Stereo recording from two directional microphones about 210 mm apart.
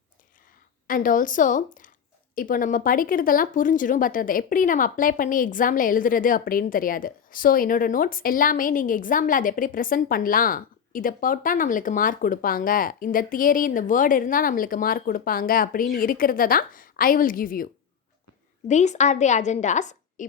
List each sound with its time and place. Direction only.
0.9 s speech: 40° left (ahead or behind)
18.7 s speech: 35° left (ahead or behind)